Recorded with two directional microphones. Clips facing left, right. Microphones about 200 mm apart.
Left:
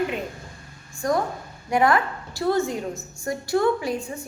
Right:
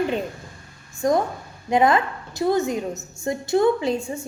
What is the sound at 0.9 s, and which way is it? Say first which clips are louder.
A woman's voice: right 3 dB; 20° right (ahead or behind).